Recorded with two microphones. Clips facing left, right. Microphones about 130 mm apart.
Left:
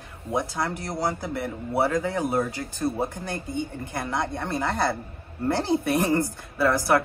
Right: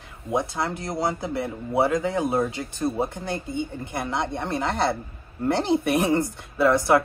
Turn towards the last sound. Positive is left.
turn(degrees=-20)  # may be behind; listen again after turning